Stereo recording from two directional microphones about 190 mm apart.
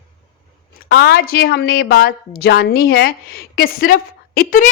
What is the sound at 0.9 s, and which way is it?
A woman's voice, 55° left (ahead or behind).